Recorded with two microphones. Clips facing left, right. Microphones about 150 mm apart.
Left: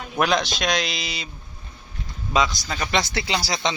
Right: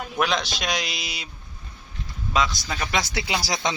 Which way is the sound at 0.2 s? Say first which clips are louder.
Left 4 dB; centre (ahead or behind).